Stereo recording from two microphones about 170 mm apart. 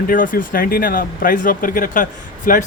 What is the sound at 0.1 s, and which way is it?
Speech, 55° left (ahead or behind).